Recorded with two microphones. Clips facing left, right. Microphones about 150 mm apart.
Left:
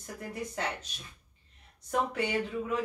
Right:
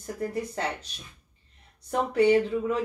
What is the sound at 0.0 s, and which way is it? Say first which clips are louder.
Speech: right 9 dB; 35° right (ahead or behind).